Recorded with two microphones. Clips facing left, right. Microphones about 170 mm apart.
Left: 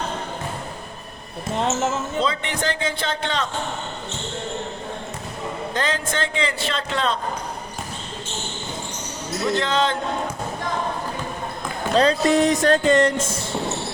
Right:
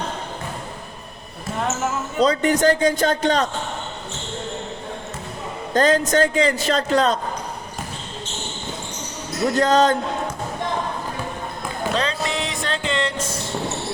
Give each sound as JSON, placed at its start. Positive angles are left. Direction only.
{"t": 1.5, "sound": "speech", "side_deg": 25}
{"t": 2.1, "sound": "a man's voice", "side_deg": -40}
{"t": 5.7, "sound": "a man's voice", "side_deg": -40}
{"t": 9.6, "sound": "a man's voice", "side_deg": -40}
{"t": 11.9, "sound": "speech", "side_deg": 40}